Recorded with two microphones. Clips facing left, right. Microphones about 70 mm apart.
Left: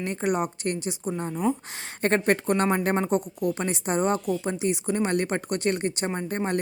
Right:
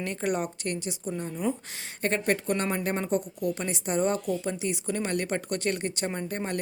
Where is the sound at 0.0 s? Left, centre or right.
Left.